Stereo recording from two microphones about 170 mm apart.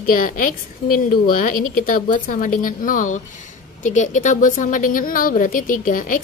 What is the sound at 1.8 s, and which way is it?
Speech, 50° left (ahead or behind).